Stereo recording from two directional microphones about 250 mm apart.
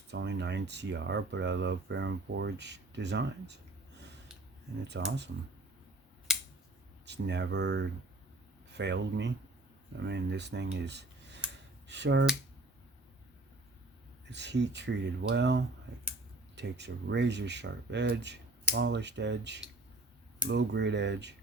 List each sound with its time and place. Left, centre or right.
0.1 s speech: right
4.9 s speech: right
7.0 s speech: right
10.8 s a sound: right
11.9 s speech: right
14.3 s speech: right